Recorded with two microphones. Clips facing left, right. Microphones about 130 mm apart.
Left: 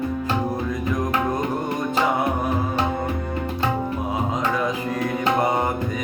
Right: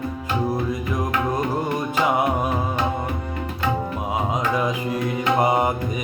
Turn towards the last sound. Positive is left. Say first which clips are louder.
# right 2 dB
turn(degrees=-10)  # may be behind; listen again after turning